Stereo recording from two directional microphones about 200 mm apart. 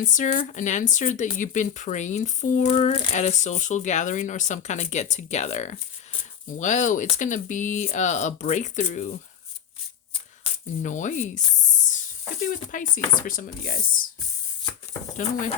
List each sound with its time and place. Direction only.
0.1 s speech: 40° left (ahead or behind)
10.4 s speech: 40° left (ahead or behind)
12.5 s speech: 40° left (ahead or behind)